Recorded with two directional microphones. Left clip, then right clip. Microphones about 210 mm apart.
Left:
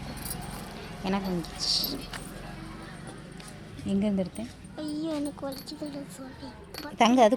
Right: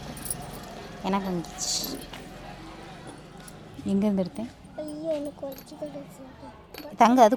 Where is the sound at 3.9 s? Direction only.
15° right (ahead or behind).